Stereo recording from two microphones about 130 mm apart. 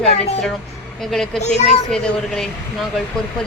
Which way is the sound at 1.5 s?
60° left (ahead or behind).